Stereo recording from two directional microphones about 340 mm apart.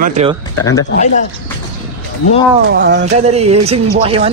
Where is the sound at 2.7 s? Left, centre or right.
Right.